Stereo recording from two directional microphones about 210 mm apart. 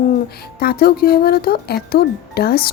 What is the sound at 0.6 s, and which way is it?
Speech, 45° left (ahead or behind).